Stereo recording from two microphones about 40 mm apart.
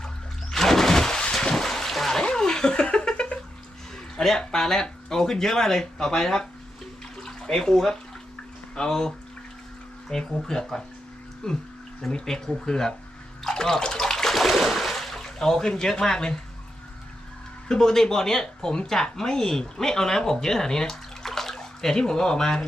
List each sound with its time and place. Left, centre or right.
0.5 s music: centre
1.3 s a sound: centre
2.2 s laughter: centre
3.9 s speech: centre
7.2 s bathtub: centre
8.7 s speech: centre
13.4 s water: centre
17.7 s speech: centre